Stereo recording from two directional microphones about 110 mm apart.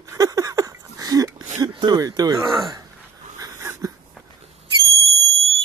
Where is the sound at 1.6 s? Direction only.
40° right (ahead or behind).